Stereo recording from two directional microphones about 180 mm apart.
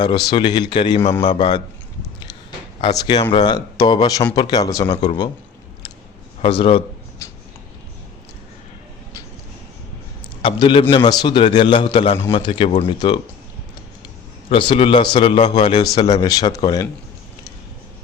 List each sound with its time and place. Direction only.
0.0 s a man's voice: 25° left (ahead or behind)
2.8 s a man's voice: 25° left (ahead or behind)
6.4 s a man's voice: 30° left (ahead or behind)
7.2 s a sound: 15° left (ahead or behind)
10.4 s a man's voice: 25° left (ahead or behind)
14.5 s a man's voice: 30° left (ahead or behind)